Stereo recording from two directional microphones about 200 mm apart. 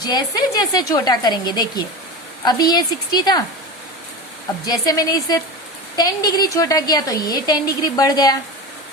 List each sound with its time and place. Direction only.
0.0 s a woman's voice: 20° left (ahead or behind)
4.6 s a woman's voice: 20° left (ahead or behind)